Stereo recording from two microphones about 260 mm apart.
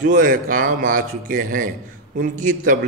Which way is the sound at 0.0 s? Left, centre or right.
Right.